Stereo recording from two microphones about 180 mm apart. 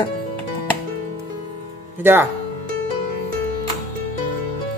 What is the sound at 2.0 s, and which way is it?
Speech, 10° right (ahead or behind).